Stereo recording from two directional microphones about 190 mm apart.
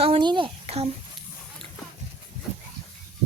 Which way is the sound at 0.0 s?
25° right (ahead or behind).